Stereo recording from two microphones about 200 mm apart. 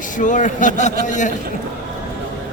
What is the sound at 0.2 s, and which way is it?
A man's voice, 40° left (ahead or behind).